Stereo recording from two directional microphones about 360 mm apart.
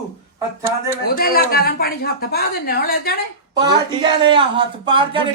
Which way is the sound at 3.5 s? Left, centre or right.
Centre.